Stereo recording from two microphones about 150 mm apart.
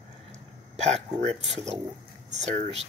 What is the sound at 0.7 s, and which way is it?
Hiccup, 45° right (ahead or behind).